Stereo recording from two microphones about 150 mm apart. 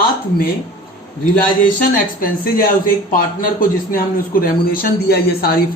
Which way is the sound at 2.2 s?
70° left (ahead or behind).